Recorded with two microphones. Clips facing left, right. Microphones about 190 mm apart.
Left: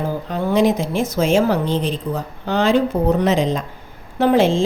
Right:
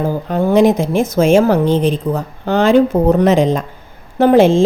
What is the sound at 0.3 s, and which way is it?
A woman's voice, 50° right (ahead or behind).